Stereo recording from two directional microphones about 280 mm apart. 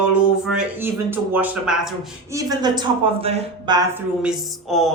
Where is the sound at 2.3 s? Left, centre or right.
Centre.